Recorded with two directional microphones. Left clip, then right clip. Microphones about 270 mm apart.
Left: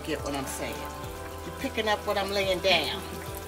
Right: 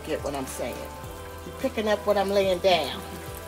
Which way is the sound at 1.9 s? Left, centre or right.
Centre.